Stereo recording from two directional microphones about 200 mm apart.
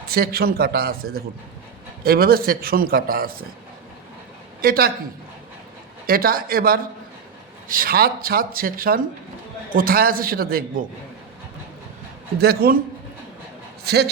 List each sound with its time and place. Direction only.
0.1 s a man's voice: 50° right (ahead or behind)
4.6 s a man's voice: 50° right (ahead or behind)
6.1 s a man's voice: 45° right (ahead or behind)
12.4 s a man's voice: 50° right (ahead or behind)
13.8 s a man's voice: 55° right (ahead or behind)